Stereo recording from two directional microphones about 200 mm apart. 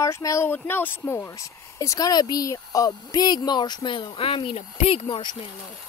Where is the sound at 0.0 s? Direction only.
15° left (ahead or behind).